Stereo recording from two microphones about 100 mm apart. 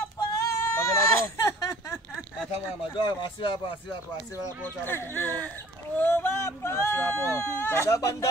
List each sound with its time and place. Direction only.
0.5 s baby cry: 30° left (ahead or behind)
2.9 s speech: 55° left (ahead or behind)
4.6 s speech: 20° left (ahead or behind)